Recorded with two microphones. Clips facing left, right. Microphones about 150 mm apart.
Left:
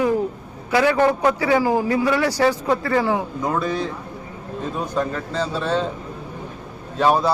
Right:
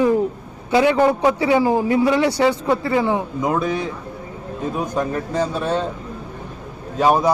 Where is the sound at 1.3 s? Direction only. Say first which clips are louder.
Right 2 dB; 20° right (ahead or behind).